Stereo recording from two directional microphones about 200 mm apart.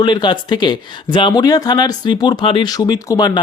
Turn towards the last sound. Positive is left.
turn(degrees=20)  # may be behind; listen again after turning